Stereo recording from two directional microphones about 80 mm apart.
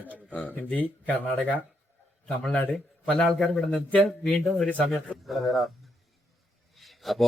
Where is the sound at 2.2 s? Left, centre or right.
Centre.